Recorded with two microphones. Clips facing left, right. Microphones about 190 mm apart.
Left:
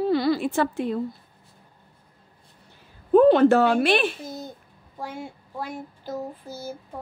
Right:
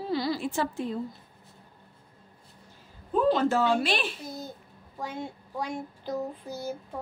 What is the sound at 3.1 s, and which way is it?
Speech, 65° left (ahead or behind).